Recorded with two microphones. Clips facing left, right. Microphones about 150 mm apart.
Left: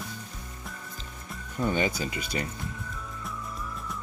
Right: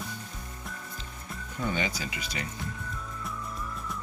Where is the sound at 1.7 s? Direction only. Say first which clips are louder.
Left 4 dB; 45° left (ahead or behind).